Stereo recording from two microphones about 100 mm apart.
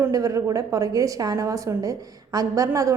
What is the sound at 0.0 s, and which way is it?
A woman's voice, 35° right (ahead or behind).